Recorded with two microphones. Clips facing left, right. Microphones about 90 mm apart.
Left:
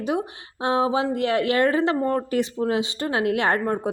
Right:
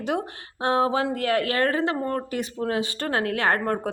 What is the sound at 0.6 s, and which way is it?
Speech, 20° left (ahead or behind).